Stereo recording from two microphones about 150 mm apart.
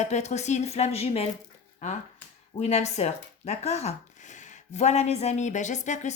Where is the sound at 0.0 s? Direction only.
50° left (ahead or behind).